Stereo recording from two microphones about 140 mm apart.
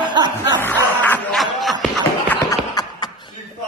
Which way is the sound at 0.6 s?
15° left (ahead or behind).